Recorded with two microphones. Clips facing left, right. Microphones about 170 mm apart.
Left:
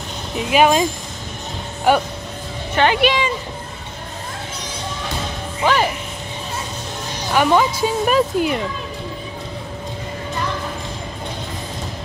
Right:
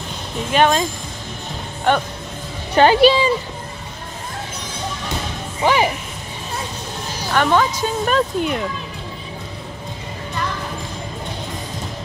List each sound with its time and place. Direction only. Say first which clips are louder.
0.5 s speech: left 2 dB; 5° left (ahead or behind)
1.9 s speech: left 2 dB; 5° left (ahead or behind)
2.7 s a woman's voice: right 5 dB; 35° right (ahead or behind)
5.6 s speech: right 1 dB; 15° right (ahead or behind)
7.3 s speech: left 1 dB; 10° left (ahead or behind)